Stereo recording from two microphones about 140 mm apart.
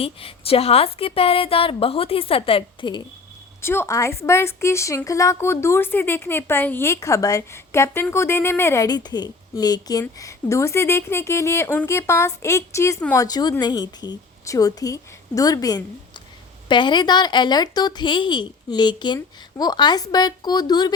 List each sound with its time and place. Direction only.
0.0 s a woman's voice: 45° left (ahead or behind)
3.6 s a woman's voice: 15° left (ahead or behind)
13.1 s a woman's voice: 25° left (ahead or behind)